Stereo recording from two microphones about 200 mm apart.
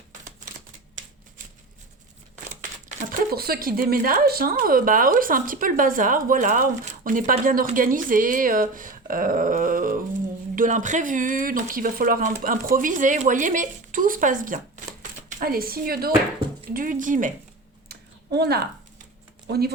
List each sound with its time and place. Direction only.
0.1 s typewriter: 40° right (ahead or behind)
2.9 s speech: 40° right (ahead or behind)
17.8 s a sound: 55° right (ahead or behind)
19.5 s speech: 55° right (ahead or behind)